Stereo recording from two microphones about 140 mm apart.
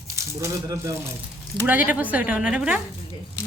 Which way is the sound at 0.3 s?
20° right (ahead or behind).